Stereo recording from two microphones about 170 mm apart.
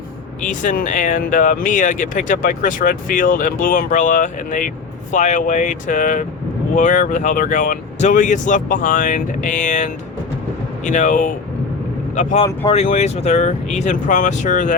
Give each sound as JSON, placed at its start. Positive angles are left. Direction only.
{"t": 0.4, "sound": "speech", "side_deg": 50}
{"t": 12.4, "sound": "speech", "side_deg": 20}
{"t": 12.7, "sound": "speech", "side_deg": 45}